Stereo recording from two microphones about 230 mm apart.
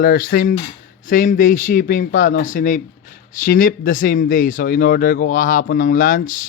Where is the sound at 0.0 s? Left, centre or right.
Left.